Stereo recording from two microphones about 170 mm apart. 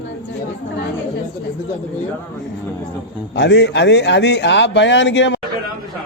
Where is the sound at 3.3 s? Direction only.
90° left.